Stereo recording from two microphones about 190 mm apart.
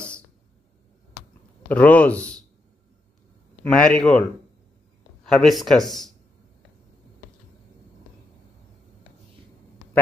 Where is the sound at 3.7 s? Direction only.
5° left (ahead or behind).